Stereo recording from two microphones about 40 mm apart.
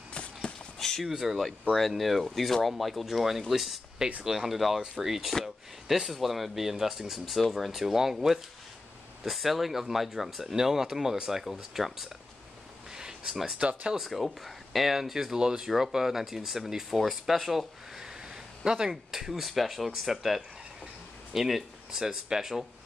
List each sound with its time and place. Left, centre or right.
0.1 s clip-clop: left
1.0 s speech: centre
1.7 s speech: centre
12.9 s a sound: centre
13.6 s speech: right
13.9 s speech: centre
19.1 s speech: centre